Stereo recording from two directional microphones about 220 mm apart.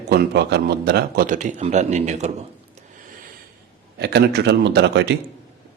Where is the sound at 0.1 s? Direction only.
50° right (ahead or behind); by 2.3 s 30° right (ahead or behind).